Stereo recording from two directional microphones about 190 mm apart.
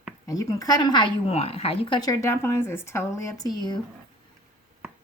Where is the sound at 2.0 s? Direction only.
15° left (ahead or behind).